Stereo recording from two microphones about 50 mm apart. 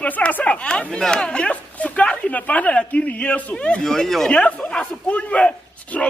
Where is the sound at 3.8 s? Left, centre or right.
Centre.